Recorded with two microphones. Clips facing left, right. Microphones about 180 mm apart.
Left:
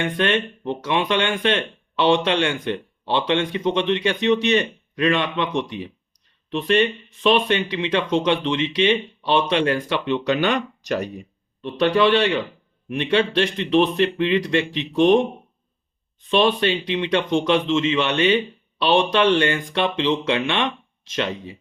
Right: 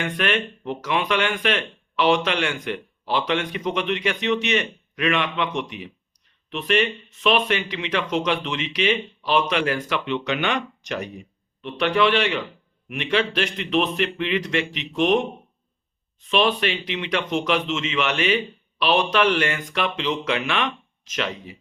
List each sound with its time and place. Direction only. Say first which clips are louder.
0.0 s speech: left 3 dB; 25° left (ahead or behind)
16.3 s speech: left 3 dB; 30° left (ahead or behind)